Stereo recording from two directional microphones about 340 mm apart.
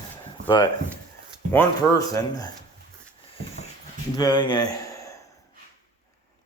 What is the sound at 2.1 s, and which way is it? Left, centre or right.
Speech, centre.